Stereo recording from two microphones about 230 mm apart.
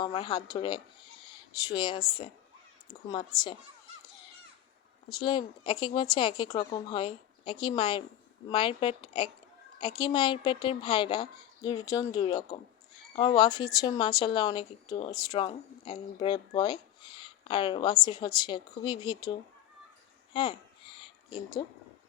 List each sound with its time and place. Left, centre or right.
0.0 s speech: left
5.0 s speech: centre
20.3 s a sound: left